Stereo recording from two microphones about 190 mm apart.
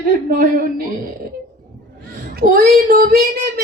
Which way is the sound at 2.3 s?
55° right (ahead or behind).